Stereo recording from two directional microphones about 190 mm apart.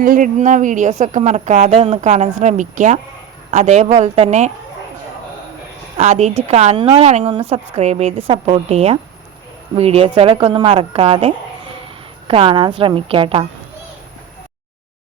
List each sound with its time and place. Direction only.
0.0 s a woman's voice: 45° right (ahead or behind)
6.0 s a woman's voice: 35° right (ahead or behind)